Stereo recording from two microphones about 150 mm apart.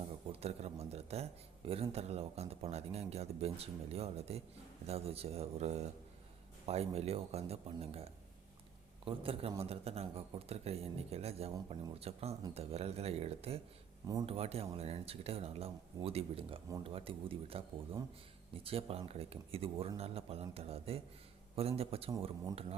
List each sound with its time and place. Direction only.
0.3 s speech: 45° right (ahead or behind)
9.0 s speech: 40° right (ahead or behind)